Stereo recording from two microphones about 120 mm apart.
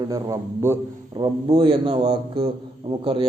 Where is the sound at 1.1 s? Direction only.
35° right (ahead or behind).